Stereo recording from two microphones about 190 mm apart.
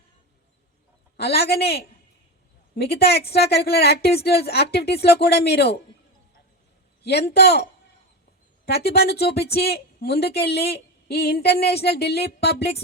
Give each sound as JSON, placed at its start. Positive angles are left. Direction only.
{"t": 1.1, "sound": "speech", "side_deg": 55}
{"t": 7.0, "sound": "speech", "side_deg": 60}